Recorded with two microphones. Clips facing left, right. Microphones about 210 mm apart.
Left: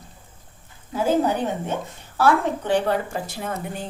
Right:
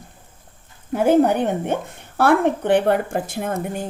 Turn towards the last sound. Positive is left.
turn(degrees=-50)  # may be behind; listen again after turning